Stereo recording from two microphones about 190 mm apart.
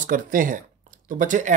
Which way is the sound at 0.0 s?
45° right (ahead or behind).